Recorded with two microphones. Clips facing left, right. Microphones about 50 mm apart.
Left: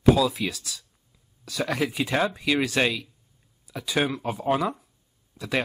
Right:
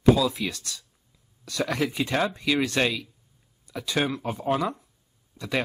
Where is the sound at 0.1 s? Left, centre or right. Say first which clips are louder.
Even; centre.